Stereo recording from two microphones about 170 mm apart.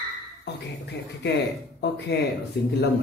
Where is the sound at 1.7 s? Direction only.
80° left.